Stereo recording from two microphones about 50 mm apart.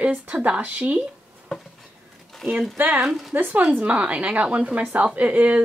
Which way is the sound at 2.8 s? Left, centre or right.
Right.